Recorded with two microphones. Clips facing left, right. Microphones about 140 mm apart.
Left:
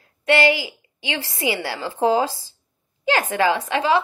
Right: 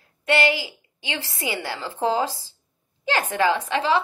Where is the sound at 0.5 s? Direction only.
15° left (ahead or behind).